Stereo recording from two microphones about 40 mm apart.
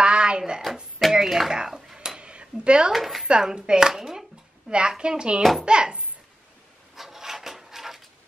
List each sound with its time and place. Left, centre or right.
0.0 s chopping: right
1.1 s speech: centre
1.5 s dishes: centre
2.0 s a sound: right
2.9 s speech: centre
3.3 s a woman's voice: right
5.4 s speech: centre
5.7 s a woman's voice: right
7.0 s wood: centre